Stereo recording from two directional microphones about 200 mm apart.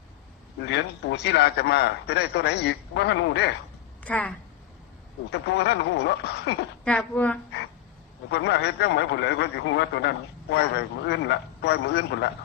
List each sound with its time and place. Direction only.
0.6 s a man's voice: 60° left (ahead or behind)
4.0 s speech: 5° left (ahead or behind)
5.3 s a man's voice: 55° left (ahead or behind)
6.8 s speech: 5° left (ahead or behind)
8.3 s a man's voice: 55° left (ahead or behind)